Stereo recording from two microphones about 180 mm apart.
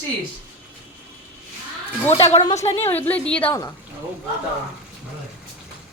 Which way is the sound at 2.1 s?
30° left (ahead or behind).